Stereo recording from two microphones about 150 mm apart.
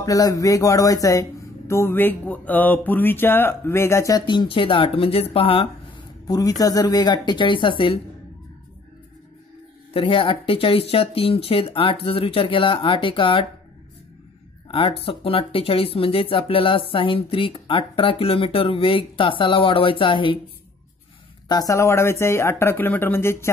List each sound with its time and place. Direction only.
0.0 s speech: 20° left (ahead or behind); by 5.7 s 40° left (ahead or behind)
6.2 s speech: 25° left (ahead or behind)
9.9 s speech: 35° left (ahead or behind)
14.7 s speech: 40° left (ahead or behind)
21.5 s speech: 25° left (ahead or behind)